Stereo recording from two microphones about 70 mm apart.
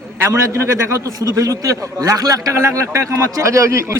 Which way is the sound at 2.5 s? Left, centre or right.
Right.